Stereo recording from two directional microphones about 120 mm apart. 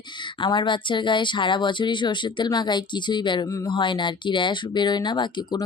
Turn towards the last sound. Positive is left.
turn(degrees=40)  # may be behind; listen again after turning